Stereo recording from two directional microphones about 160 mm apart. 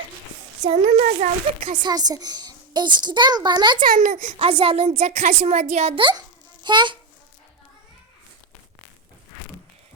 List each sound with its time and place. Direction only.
0.6 s a woman's voice: 45° right (ahead or behind)
1.8 s a child's voice: 25° right (ahead or behind)
3.8 s a child's voice: 55° right (ahead or behind)
4.4 s a woman's voice: 35° right (ahead or behind)